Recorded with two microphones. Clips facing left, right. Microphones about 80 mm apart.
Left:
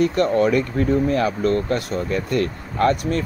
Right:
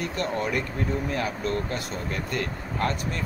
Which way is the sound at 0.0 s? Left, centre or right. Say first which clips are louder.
Left 11 dB; left.